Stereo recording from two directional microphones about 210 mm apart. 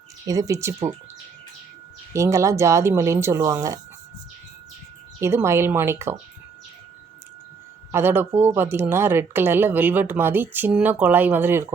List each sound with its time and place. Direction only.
0.3 s speech: 15° right (ahead or behind)
2.1 s speech: 15° right (ahead or behind)
5.2 s speech: 10° right (ahead or behind)
7.9 s speech: 10° right (ahead or behind)